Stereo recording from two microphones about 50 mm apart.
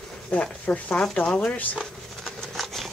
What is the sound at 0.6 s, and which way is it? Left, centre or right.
Speech, left.